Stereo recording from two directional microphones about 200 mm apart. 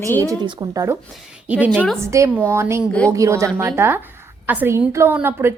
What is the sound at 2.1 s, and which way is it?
A woman's voice, 15° right (ahead or behind).